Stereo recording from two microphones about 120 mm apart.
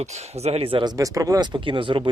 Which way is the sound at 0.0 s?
70° right (ahead or behind).